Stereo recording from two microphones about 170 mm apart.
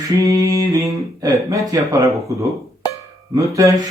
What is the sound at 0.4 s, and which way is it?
Speech, 20° right (ahead or behind).